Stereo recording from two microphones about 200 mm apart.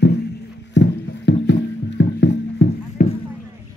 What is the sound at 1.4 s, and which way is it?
Music, 60° left (ahead or behind).